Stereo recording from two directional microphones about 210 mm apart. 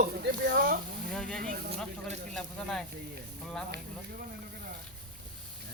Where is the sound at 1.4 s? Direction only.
45° right (ahead or behind).